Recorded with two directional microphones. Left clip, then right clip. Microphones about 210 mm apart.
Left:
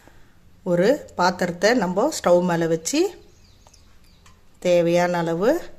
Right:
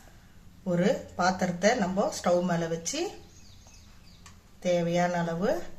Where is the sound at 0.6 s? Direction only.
55° left (ahead or behind).